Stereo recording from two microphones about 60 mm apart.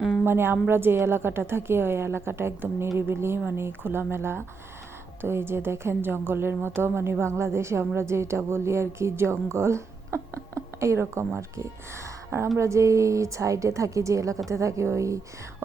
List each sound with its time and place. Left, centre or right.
0.3 s a woman's voice: right